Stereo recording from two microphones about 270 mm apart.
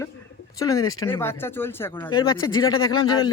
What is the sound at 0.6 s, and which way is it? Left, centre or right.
Speech, centre.